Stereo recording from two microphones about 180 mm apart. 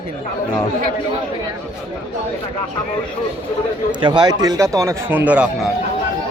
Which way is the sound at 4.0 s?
25° right (ahead or behind).